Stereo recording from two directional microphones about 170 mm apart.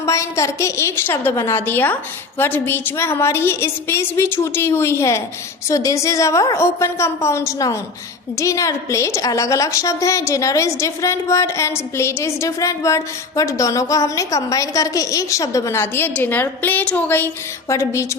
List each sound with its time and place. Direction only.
0.0 s a woman's voice: 20° left (ahead or behind)